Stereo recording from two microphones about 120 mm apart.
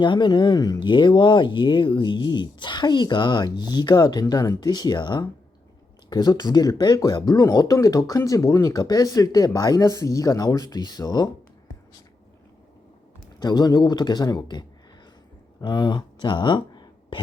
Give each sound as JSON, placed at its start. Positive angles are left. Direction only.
{"t": 0.0, "sound": "speech", "side_deg": 40}
{"t": 13.4, "sound": "speech", "side_deg": 35}